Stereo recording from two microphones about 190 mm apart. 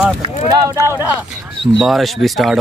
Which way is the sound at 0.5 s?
15° right (ahead or behind).